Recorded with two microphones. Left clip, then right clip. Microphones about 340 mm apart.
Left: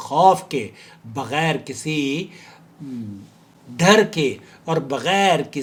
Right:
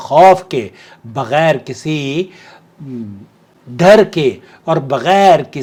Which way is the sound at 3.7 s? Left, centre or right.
Right.